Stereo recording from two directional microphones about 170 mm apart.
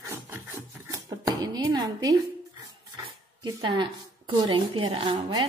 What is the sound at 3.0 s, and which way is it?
Speech, 25° right (ahead or behind).